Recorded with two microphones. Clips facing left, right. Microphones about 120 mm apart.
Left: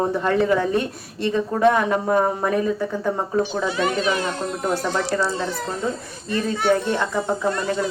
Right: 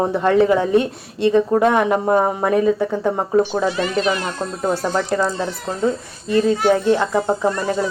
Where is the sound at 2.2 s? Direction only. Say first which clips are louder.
Right 3 dB; 15° right (ahead or behind).